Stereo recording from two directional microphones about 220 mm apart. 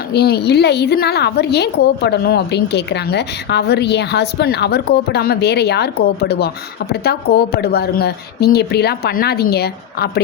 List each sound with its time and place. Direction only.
0.1 s a woman's voice: 45° left (ahead or behind)